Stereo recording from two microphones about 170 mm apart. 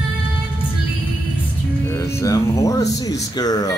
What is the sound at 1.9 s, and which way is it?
Speech, 15° left (ahead or behind).